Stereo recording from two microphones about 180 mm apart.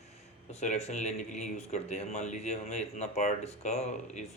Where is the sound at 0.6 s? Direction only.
40° left (ahead or behind).